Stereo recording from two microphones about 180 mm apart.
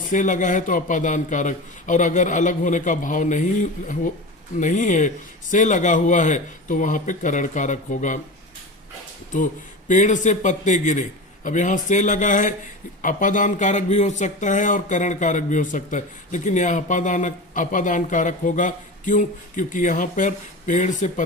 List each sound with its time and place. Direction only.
0.1 s speech: 45° left (ahead or behind)
9.9 s speech: 45° left (ahead or behind)